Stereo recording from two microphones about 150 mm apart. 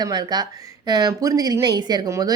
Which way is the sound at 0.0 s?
25° right (ahead or behind).